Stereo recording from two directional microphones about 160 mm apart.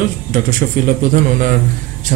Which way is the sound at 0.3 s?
65° right (ahead or behind).